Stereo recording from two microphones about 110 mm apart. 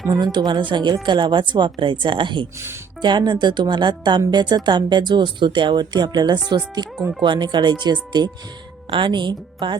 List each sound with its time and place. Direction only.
0.1 s speech: 40° right (ahead or behind)